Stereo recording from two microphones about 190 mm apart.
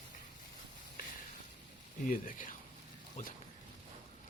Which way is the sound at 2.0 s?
45° left (ahead or behind).